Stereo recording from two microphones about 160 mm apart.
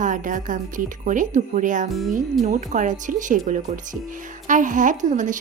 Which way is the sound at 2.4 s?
50° right (ahead or behind).